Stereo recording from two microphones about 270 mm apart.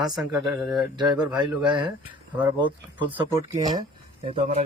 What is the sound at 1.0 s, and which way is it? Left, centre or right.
Speech, centre.